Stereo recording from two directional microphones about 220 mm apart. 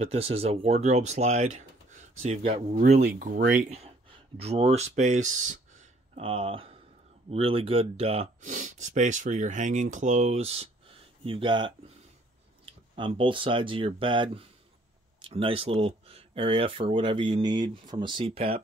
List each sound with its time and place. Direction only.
0.0 s speech: 25° right (ahead or behind)
3.0 s speech: 45° right (ahead or behind)
3.7 s a sound: 25° right (ahead or behind)
4.9 s speech: 30° right (ahead or behind)
12.9 s speech: 20° right (ahead or behind)